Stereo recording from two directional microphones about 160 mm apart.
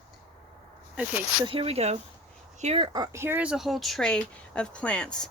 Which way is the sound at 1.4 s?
35° right (ahead or behind).